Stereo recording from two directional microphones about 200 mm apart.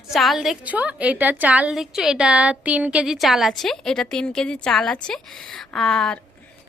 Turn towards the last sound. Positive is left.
turn(degrees=5)  # may be behind; listen again after turning